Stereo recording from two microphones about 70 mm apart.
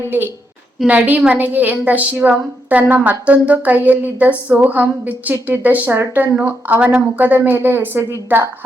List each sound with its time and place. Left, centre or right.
0.0 s a woman's voice: right